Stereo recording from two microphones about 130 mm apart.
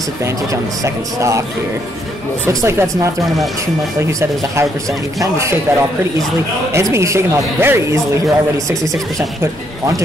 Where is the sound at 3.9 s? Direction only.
20° right (ahead or behind).